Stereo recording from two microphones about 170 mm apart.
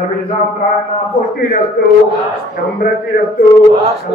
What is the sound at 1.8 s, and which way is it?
Speech, 70° left (ahead or behind).